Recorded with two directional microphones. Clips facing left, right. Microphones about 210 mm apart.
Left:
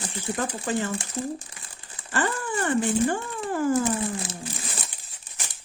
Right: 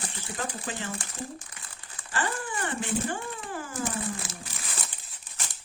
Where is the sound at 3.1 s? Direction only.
45° left (ahead or behind).